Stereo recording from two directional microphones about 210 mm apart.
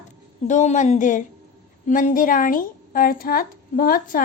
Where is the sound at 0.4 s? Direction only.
35° left (ahead or behind).